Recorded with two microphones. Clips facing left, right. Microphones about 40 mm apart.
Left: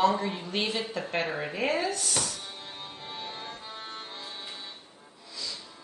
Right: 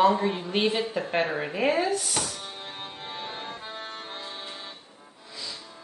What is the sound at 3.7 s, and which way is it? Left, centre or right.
Accordion, right.